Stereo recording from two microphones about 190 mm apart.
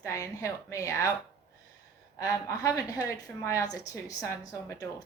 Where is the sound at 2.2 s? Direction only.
15° left (ahead or behind).